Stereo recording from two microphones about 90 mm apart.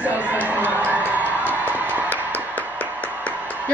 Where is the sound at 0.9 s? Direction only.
20° right (ahead or behind).